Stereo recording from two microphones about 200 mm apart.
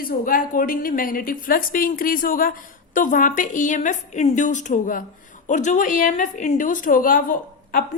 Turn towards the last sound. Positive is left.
turn(degrees=45)  # may be behind; listen again after turning